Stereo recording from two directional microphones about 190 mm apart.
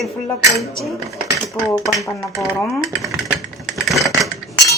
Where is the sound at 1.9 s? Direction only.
15° left (ahead or behind).